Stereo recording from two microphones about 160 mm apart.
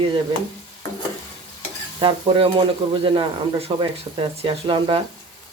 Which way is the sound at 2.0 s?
30° right (ahead or behind).